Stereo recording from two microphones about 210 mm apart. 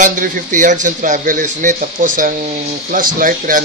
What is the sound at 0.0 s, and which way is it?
Speech, 40° right (ahead or behind).